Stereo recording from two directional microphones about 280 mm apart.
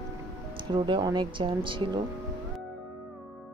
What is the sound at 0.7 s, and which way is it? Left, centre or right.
Speech, centre.